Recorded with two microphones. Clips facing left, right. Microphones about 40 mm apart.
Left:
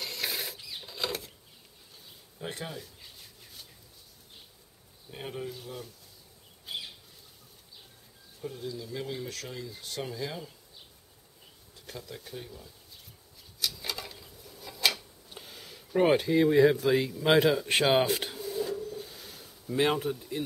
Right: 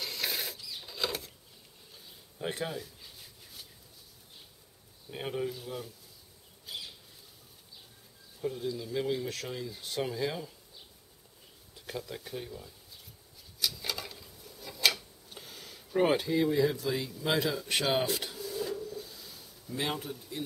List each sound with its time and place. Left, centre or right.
0.0 s mechanisms: centre
0.6 s a sound: left
0.8 s a sound: centre
2.3 s speech: centre
5.1 s speech: centre
6.6 s a sound: left
8.4 s speech: centre
11.7 s speech: centre
13.6 s a sound: centre
16.5 s speech: left
18.1 s drawer open or close: left
18.8 s bird: left